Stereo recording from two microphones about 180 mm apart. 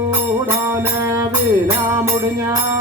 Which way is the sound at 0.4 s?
15° right (ahead or behind).